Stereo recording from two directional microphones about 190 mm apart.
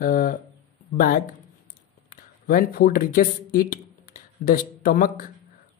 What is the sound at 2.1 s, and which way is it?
Speech, 45° left (ahead or behind).